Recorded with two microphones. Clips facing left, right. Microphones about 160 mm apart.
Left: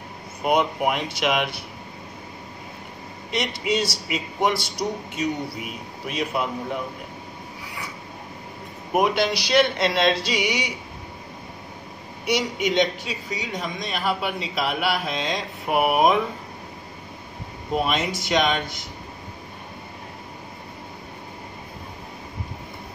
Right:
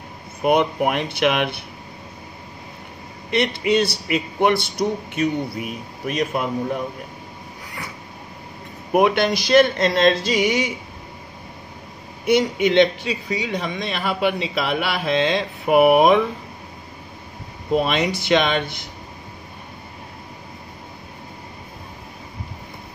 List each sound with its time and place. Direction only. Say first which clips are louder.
0.5 s a man's voice: right 3 dB; 55° right (ahead or behind)
3.3 s a man's voice: right 5 dB; 60° right (ahead or behind)
9.0 s speech: right 3 dB; 55° right (ahead or behind)
12.3 s a man's voice: right 6 dB; 55° right (ahead or behind)
17.8 s a man's voice: right 4 dB; 65° right (ahead or behind)